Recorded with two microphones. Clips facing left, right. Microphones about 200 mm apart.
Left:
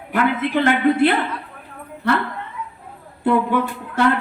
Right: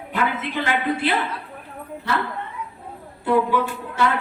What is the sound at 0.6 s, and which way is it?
Speech, 55° left (ahead or behind).